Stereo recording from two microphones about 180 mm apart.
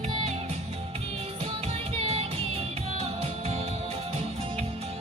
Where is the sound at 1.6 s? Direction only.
35° right (ahead or behind).